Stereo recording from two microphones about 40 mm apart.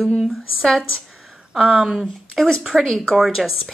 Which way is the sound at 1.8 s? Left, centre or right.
Centre.